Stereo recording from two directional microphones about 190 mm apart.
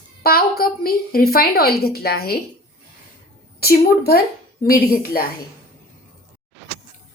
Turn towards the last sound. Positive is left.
turn(degrees=50)  # may be behind; listen again after turning